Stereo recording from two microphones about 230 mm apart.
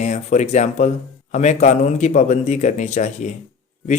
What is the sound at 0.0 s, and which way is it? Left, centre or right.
Speech, left.